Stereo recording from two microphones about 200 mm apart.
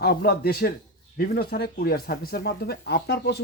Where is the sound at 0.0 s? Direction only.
50° left (ahead or behind).